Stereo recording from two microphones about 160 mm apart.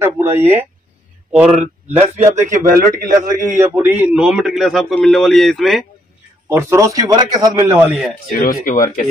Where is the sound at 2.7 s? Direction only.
65° right (ahead or behind).